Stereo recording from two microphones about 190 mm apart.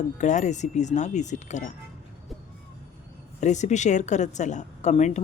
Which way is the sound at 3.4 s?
40° left (ahead or behind).